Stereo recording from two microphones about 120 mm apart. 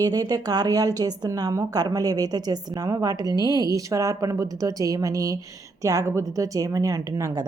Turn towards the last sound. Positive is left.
turn(degrees=-30)  # may be behind; listen again after turning